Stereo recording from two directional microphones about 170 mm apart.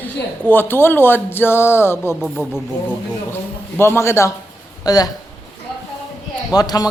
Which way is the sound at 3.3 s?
10° left (ahead or behind).